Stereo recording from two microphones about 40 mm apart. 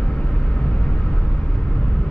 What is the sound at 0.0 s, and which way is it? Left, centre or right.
Vehicle, left.